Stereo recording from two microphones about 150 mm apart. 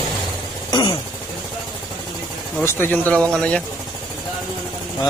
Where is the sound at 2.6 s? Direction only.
15° left (ahead or behind).